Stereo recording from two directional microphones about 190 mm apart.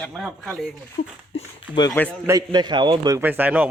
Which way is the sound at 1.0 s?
45° left (ahead or behind).